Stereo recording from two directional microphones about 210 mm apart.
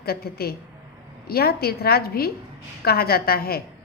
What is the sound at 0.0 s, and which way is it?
A woman's voice, 45° left (ahead or behind).